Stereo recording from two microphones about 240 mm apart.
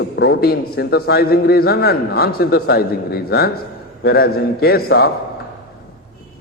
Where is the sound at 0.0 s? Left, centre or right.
Left.